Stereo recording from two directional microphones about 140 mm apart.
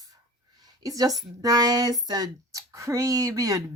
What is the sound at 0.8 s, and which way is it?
Speech, 25° right (ahead or behind).